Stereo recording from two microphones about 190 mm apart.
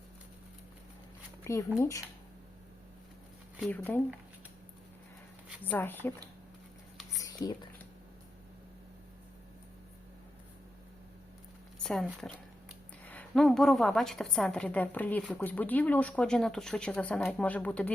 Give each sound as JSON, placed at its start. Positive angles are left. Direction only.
{"t": 1.5, "sound": "speech", "side_deg": 15}
{"t": 3.6, "sound": "speech", "side_deg": 5}
{"t": 5.6, "sound": "speech", "side_deg": 10}
{"t": 7.2, "sound": "a sound", "side_deg": 20}
{"t": 11.8, "sound": "speech", "side_deg": 5}
{"t": 13.1, "sound": "a woman's voice", "side_deg": 5}